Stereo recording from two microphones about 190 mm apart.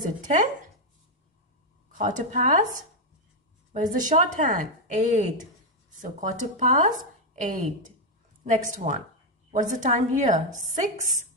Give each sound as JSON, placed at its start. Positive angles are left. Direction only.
{"t": 0.2, "sound": "speech", "side_deg": -40}
{"t": 1.9, "sound": "a woman's voice", "side_deg": -40}
{"t": 3.9, "sound": "a woman's voice", "side_deg": -45}